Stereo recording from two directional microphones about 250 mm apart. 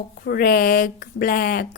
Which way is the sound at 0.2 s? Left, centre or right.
Left.